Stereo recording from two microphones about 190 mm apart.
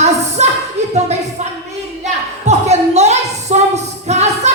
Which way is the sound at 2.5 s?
35° right (ahead or behind).